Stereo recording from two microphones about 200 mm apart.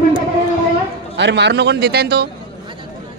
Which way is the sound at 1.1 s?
60° right (ahead or behind).